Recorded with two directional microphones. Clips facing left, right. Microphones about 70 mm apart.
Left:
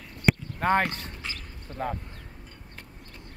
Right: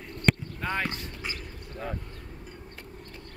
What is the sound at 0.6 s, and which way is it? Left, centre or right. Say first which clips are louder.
Speech: left 8 dB; left.